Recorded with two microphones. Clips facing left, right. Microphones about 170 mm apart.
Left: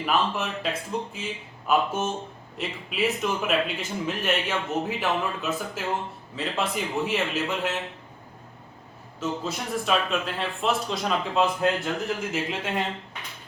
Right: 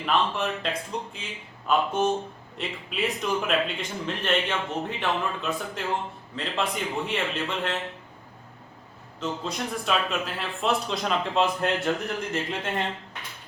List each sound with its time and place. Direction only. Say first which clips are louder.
0.0 s speech: even; 5° left (ahead or behind)
9.2 s speech: left 1 dB; 5° left (ahead or behind)